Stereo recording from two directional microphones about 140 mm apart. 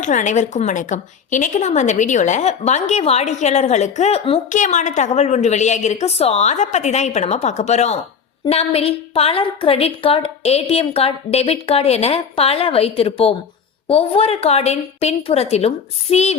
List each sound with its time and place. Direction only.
0.0 s a woman's voice: 65° left (ahead or behind)
4.5 s a woman's voice: 60° left (ahead or behind)